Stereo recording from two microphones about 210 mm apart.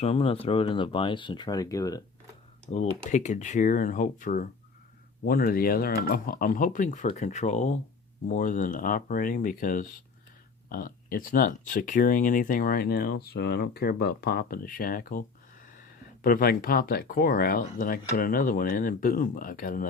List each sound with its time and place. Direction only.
0.0 s speech: 30° left (ahead or behind)
2.7 s speech: 35° left (ahead or behind)
16.2 s speech: 45° left (ahead or behind)